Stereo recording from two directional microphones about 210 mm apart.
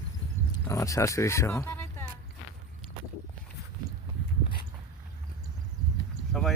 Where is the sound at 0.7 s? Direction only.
15° left (ahead or behind).